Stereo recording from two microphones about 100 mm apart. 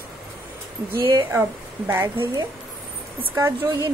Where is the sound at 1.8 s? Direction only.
25° right (ahead or behind).